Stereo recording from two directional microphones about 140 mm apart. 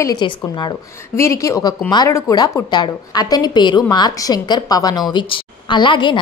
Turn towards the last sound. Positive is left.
turn(degrees=35)  # may be behind; listen again after turning